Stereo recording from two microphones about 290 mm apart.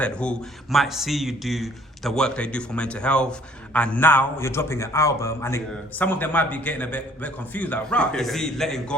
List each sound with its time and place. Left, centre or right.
0.0 s a man's voice: centre